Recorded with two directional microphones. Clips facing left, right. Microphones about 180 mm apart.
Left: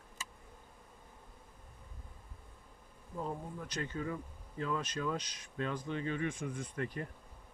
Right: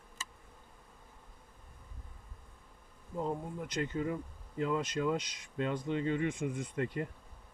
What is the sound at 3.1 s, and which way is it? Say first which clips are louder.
Speech: right 4 dB; 20° right (ahead or behind).